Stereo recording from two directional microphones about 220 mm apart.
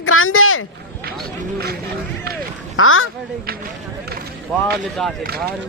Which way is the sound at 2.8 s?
70° left (ahead or behind).